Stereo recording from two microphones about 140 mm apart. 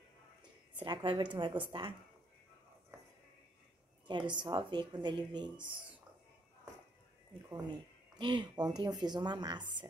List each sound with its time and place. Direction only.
0.7 s speech: 35° right (ahead or behind)
4.1 s speech: 35° right (ahead or behind)
8.2 s speech: 35° right (ahead or behind)